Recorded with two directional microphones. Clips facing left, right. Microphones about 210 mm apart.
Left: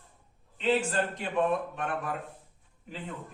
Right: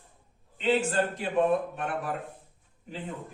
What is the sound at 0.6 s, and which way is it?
A man's voice, 30° right (ahead or behind).